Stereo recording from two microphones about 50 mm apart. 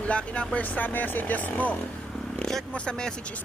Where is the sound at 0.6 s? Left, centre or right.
Left.